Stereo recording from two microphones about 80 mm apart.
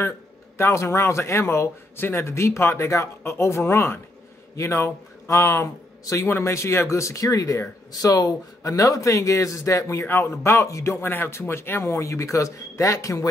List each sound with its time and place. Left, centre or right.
0.6 s a man's voice: left